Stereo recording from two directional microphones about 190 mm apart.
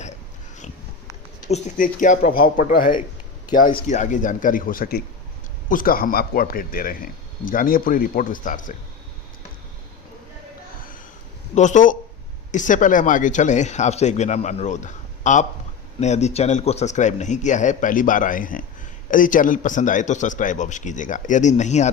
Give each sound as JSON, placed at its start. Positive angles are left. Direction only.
{"t": 1.5, "sound": "speech", "side_deg": 35}
{"t": 11.5, "sound": "speech", "side_deg": 40}